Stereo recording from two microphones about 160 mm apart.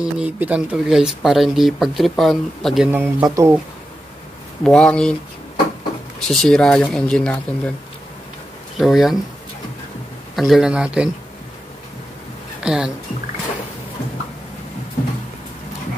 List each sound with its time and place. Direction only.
0.0 s speech: 5° right (ahead or behind)
2.9 s speech: 10° right (ahead or behind)
4.6 s speech: 5° left (ahead or behind)
6.2 s speech: 5° left (ahead or behind)
8.7 s speech: centre (ahead or behind)
10.3 s speech: centre (ahead or behind)
12.6 s speech: 5° right (ahead or behind)